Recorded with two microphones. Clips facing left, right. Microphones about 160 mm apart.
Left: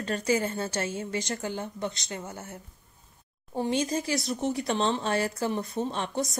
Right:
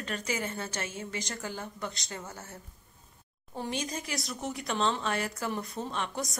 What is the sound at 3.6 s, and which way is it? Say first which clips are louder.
Speech: left 8 dB; 30° left (ahead or behind).